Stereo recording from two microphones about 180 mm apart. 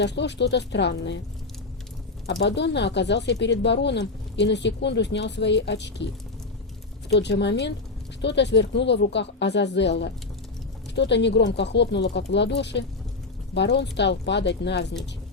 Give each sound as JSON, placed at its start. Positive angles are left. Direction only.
{"t": 0.0, "sound": "speech", "side_deg": 75}
{"t": 2.2, "sound": "speech", "side_deg": 75}
{"t": 7.1, "sound": "speech", "side_deg": 70}